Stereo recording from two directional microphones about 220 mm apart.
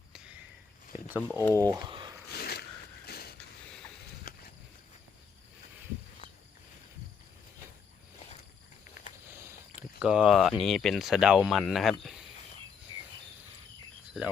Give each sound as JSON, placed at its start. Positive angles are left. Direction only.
{"t": 1.0, "sound": "speech", "side_deg": -10}
{"t": 2.3, "sound": "a sound", "side_deg": 45}
{"t": 10.0, "sound": "speech", "side_deg": -5}